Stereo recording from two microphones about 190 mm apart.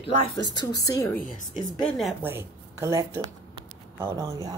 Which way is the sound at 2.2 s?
15° right (ahead or behind).